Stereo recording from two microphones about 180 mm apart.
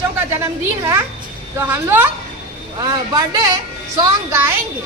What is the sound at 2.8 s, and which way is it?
A woman's voice, 25° right (ahead or behind).